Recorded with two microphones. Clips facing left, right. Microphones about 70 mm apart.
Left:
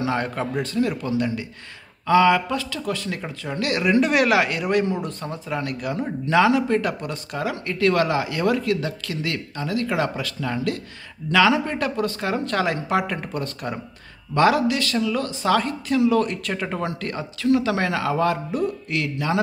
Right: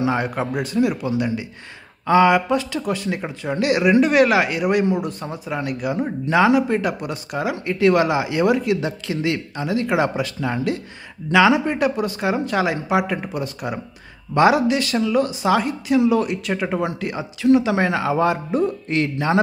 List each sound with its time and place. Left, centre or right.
0.0 s speech: centre
2.0 s a man's voice: right
3.8 s a man's voice: centre; by 19.4 s right